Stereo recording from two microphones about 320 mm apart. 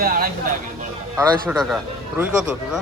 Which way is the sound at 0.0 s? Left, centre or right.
Right.